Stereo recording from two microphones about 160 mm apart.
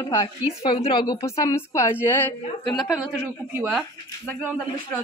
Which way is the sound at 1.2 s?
20° left (ahead or behind).